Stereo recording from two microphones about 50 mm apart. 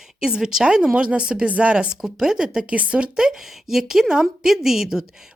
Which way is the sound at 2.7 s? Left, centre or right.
Right.